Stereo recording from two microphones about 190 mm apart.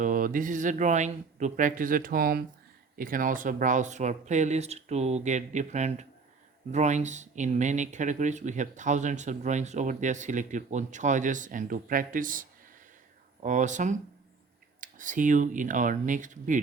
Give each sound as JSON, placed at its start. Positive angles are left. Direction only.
{"t": 0.0, "sound": "speech", "side_deg": -45}